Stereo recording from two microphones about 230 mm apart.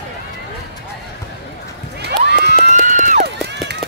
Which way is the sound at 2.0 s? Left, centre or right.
Right.